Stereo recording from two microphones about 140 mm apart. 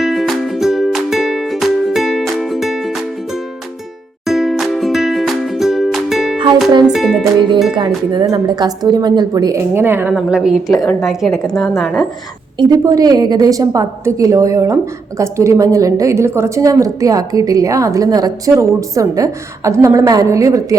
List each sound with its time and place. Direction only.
0.0 s music: centre (ahead or behind)
7.8 s a woman's voice: 35° right (ahead or behind); by 12.0 s centre (ahead or behind)
12.5 s a woman's voice: 25° right (ahead or behind)